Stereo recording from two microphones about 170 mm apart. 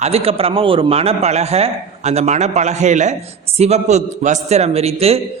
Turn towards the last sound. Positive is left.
turn(degrees=-35)  # may be behind; listen again after turning